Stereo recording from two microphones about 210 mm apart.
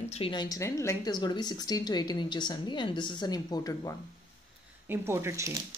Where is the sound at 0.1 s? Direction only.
25° left (ahead or behind).